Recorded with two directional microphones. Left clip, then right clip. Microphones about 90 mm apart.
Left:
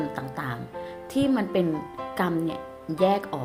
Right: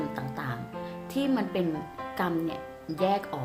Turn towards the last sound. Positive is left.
turn(degrees=40)  # may be behind; listen again after turning